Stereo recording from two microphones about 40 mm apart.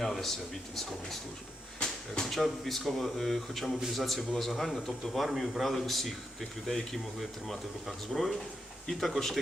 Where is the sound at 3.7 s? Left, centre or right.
Centre.